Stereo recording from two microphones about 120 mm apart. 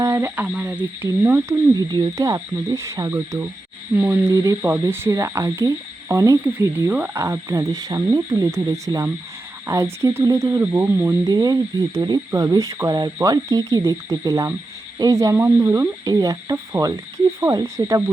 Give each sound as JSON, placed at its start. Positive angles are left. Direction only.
{"t": 0.0, "sound": "speech", "side_deg": -20}
{"t": 1.0, "sound": "speech", "side_deg": -20}
{"t": 1.7, "sound": "speech", "side_deg": -35}
{"t": 11.3, "sound": "speech", "side_deg": -35}